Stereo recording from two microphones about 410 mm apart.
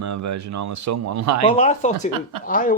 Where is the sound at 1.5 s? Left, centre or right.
Centre.